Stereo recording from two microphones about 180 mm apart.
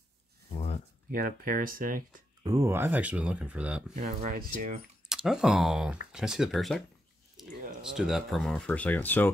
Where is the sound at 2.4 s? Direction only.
20° right (ahead or behind).